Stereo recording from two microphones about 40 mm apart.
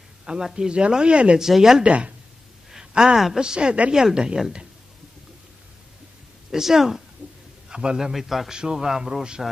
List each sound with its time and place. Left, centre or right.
0.2 s a sound: right
0.7 s speech: right
1.4 s a man's voice: centre
1.8 s speech: right
2.7 s a sound: centre
3.3 s speech: right
6.5 s a man's voice: centre
7.2 s a sound: right
7.7 s a man's voice: centre
8.1 s a man's voice: centre
8.5 s a man's voice: centre